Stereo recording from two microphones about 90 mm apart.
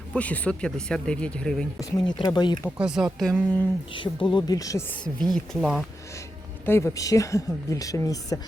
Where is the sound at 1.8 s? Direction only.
50° left (ahead or behind).